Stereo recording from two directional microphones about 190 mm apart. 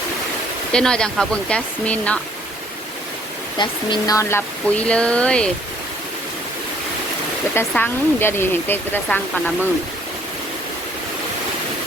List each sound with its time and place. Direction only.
0.7 s speech: 5° left (ahead or behind)
3.6 s speech: 25° left (ahead or behind); by 5.5 s 5° left (ahead or behind)
7.5 s speech: 10° left (ahead or behind)